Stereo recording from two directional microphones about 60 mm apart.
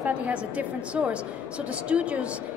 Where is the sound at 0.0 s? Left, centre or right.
Right.